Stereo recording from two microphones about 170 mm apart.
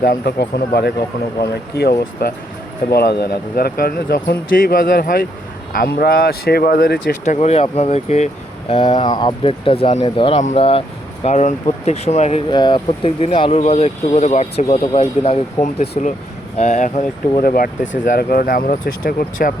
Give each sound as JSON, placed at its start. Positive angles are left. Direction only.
{"t": 0.0, "sound": "speech", "side_deg": 65}
{"t": 7.3, "sound": "speech", "side_deg": 40}
{"t": 8.7, "sound": "speech", "side_deg": 30}
{"t": 12.5, "sound": "speech", "side_deg": 25}